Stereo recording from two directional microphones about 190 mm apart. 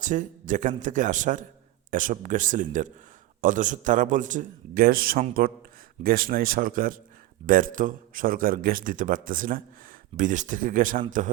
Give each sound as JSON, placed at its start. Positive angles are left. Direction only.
{"t": 0.0, "sound": "a man's voice", "side_deg": -40}